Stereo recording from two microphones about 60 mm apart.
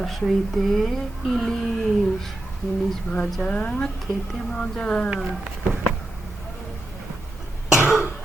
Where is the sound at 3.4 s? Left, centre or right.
Left.